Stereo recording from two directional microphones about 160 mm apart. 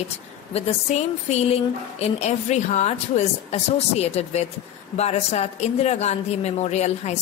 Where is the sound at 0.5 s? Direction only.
40° left (ahead or behind).